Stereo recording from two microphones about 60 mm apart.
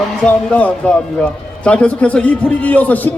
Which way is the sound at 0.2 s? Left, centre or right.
Left.